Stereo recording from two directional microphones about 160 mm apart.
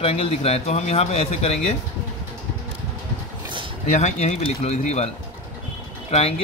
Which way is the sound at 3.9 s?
45° left (ahead or behind).